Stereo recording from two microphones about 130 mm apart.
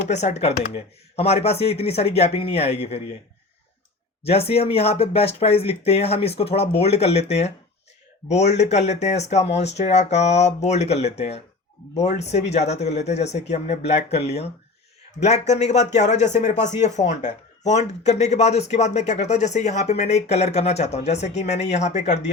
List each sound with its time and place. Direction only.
0.1 s speech: 60° left (ahead or behind)
4.3 s speech: 50° left (ahead or behind)